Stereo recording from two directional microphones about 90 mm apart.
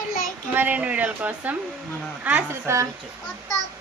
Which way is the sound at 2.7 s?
30° right (ahead or behind).